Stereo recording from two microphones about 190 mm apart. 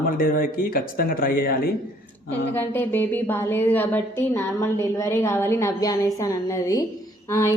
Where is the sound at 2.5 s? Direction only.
10° left (ahead or behind).